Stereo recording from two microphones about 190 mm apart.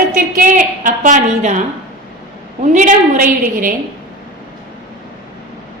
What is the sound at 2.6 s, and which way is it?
A woman's voice, 40° right (ahead or behind).